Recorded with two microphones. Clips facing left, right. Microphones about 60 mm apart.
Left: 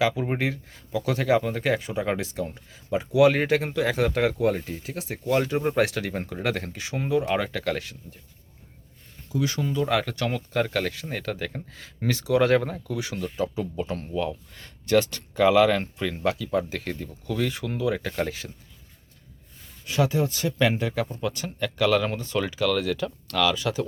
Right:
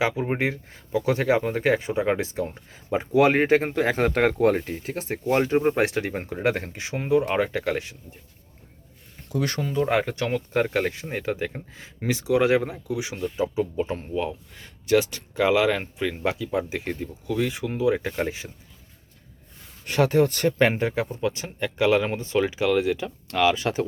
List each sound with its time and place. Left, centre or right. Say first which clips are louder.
0.2 s speech: right 2 dB; right
9.3 s speech: even; right
9.6 s speech: right 3 dB; right
19.8 s speech: right 4 dB; right
20.6 s speech: even; right